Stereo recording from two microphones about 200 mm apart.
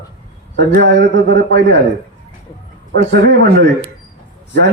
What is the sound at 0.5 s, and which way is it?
A man's voice, 60° right (ahead or behind).